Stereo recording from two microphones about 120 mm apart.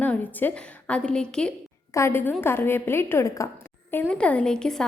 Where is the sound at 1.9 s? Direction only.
25° left (ahead or behind).